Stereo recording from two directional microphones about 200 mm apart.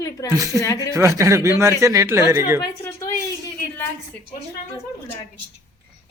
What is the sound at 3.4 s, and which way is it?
Speech, 10° left (ahead or behind).